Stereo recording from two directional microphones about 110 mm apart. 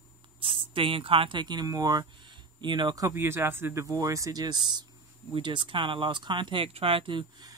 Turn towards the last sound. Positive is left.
turn(degrees=-45)  # may be behind; listen again after turning